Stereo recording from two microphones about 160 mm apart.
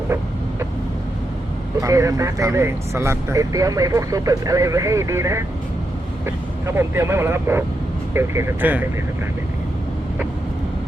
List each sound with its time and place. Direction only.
1.8 s speech: 20° right (ahead or behind)
6.7 s speech: 15° right (ahead or behind)